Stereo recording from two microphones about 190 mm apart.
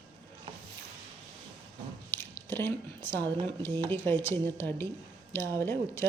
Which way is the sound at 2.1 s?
10° left (ahead or behind).